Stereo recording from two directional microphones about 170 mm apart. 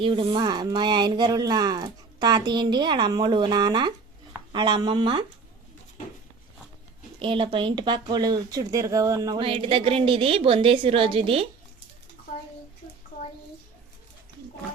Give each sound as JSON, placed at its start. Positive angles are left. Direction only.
{"t": 0.0, "sound": "speech", "side_deg": -30}
{"t": 7.2, "sound": "speech", "side_deg": -30}